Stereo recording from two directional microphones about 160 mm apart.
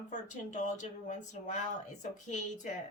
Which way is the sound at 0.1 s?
50° left (ahead or behind).